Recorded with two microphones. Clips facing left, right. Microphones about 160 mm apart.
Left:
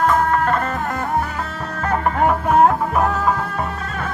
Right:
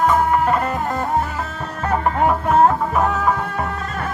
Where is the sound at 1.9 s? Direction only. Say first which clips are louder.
Even; centre (ahead or behind).